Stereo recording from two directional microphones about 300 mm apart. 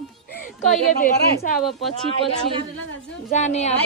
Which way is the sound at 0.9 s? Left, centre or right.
Left.